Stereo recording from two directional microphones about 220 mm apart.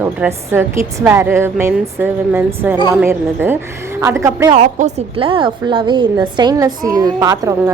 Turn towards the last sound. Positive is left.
turn(degrees=-15)  # may be behind; listen again after turning